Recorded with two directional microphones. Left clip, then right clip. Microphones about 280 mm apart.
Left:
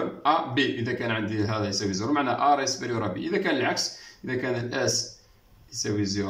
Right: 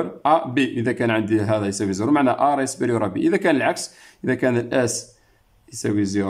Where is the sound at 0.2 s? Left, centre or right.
Right.